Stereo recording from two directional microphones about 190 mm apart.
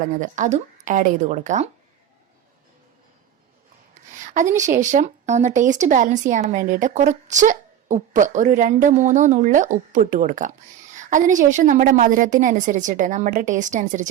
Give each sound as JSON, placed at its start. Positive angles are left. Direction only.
{"t": 0.2, "sound": "a woman's voice", "side_deg": -40}
{"t": 4.1, "sound": "a woman's voice", "side_deg": -40}